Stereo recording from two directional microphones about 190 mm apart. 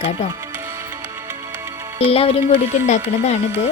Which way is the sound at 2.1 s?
30° left (ahead or behind).